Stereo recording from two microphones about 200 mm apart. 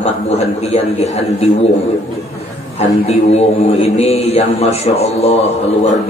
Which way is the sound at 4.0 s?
30° left (ahead or behind).